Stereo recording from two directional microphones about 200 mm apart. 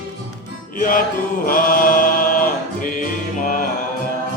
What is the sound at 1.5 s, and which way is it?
Mantra, 45° left (ahead or behind).